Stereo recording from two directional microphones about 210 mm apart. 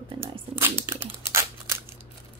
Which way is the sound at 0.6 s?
10° right (ahead or behind).